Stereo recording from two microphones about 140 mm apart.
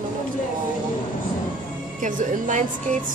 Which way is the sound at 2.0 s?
65° right (ahead or behind).